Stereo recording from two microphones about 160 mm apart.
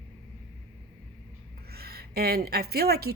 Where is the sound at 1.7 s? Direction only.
80° right.